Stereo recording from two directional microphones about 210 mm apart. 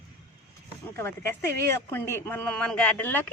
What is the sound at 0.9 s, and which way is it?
A woman's voice, 10° left (ahead or behind).